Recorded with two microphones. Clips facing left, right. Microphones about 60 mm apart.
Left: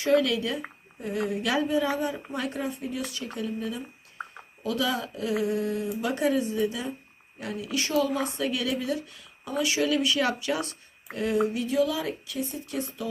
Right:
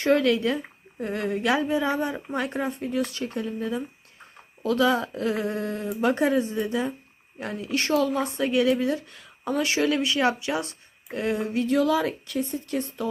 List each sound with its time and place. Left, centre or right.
0.0 s speech: right
8.4 s speech: right
11.7 s a woman's voice: right